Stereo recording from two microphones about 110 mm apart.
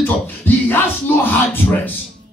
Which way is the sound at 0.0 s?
20° left (ahead or behind).